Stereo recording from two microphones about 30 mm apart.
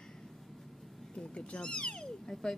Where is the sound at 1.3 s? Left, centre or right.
Left.